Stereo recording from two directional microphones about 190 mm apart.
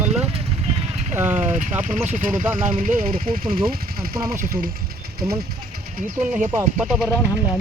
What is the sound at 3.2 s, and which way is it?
Speech, 25° right (ahead or behind).